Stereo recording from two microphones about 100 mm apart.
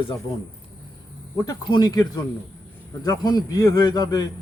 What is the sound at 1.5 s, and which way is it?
Speech, 45° left (ahead or behind).